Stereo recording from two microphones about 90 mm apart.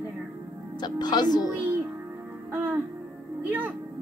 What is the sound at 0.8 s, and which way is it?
Speech, 50° left (ahead or behind).